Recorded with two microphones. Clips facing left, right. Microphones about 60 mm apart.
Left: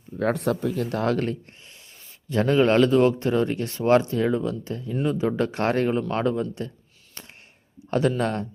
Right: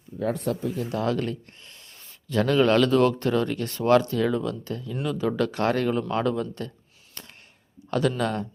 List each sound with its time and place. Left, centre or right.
0.2 s speech: left
0.9 s speech: left
2.3 s speech: left
7.9 s a man's voice: left